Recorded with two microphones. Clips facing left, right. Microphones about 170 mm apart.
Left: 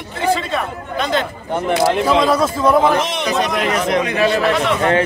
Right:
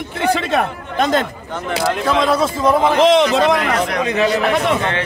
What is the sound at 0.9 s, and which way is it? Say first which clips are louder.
Speech: right 3 dB; 45° right (ahead or behind).